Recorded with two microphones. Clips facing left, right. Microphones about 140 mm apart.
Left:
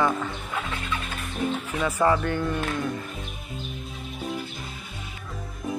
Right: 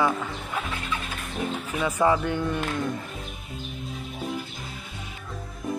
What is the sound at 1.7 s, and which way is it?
A man's voice, 10° right (ahead or behind).